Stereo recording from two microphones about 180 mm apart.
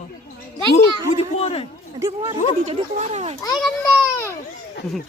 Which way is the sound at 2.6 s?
40° right (ahead or behind).